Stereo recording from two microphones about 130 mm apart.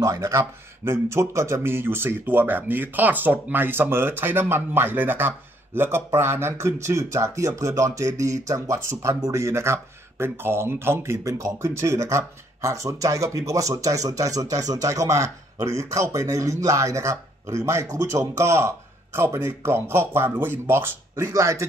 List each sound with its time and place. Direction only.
0.0 s speech: 25° right (ahead or behind)